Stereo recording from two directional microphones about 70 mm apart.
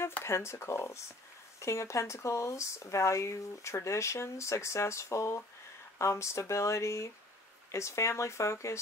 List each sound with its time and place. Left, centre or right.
0.2 s speech: left